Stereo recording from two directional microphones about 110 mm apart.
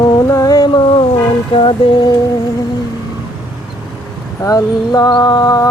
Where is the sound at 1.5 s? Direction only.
50° left (ahead or behind).